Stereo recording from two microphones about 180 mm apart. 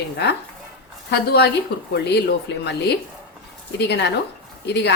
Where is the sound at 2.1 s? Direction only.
70° left (ahead or behind).